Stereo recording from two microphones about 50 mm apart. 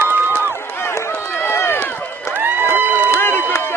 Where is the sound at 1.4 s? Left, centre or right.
Left.